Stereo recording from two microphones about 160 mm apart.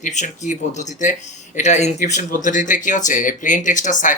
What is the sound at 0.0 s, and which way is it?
Speech, 50° left (ahead or behind).